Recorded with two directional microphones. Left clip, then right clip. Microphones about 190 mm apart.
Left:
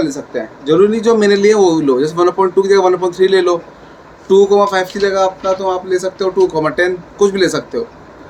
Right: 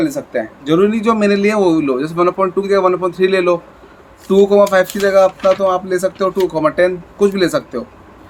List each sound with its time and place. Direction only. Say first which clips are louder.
0.0 s a man's voice: right 1 dB; 35° right (ahead or behind)